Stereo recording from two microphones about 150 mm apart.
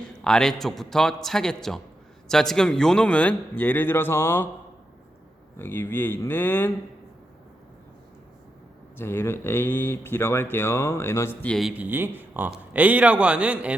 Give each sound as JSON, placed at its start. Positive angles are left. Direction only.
{"t": 0.0, "sound": "a man's voice", "side_deg": 5}
{"t": 5.5, "sound": "speech", "side_deg": 15}
{"t": 9.0, "sound": "speech", "side_deg": 15}
{"t": 11.7, "sound": "a man's voice", "side_deg": -10}